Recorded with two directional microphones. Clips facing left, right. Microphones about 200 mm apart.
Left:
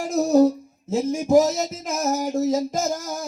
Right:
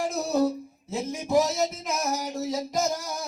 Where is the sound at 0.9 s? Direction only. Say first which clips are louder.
Left 8 dB; 45° left (ahead or behind).